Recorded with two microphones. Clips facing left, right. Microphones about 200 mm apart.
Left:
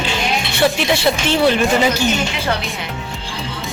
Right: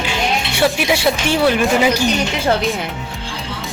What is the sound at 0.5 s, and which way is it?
Speech, 10° right (ahead or behind).